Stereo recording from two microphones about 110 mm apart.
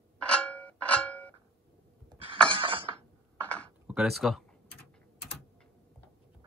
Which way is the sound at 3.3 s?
10° left (ahead or behind).